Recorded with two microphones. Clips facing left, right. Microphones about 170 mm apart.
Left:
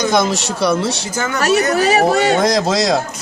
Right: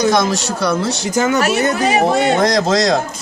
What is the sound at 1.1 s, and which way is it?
Speech, 20° right (ahead or behind).